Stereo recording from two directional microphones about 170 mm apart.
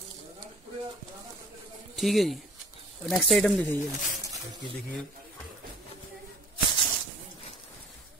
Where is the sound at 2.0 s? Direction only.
Centre (ahead or behind).